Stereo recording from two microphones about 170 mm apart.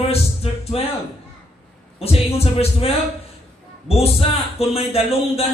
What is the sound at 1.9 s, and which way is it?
Speech, 35° left (ahead or behind).